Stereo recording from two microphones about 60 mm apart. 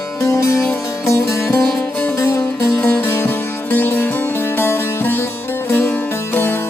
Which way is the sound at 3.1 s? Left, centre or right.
Left.